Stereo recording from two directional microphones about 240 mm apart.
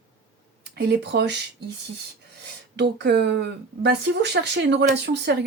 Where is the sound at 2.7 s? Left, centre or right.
Right.